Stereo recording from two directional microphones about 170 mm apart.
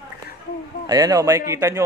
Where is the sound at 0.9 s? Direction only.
20° right (ahead or behind).